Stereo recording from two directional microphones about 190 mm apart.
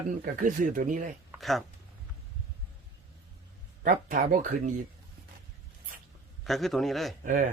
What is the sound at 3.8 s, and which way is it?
Speech, 40° right (ahead or behind).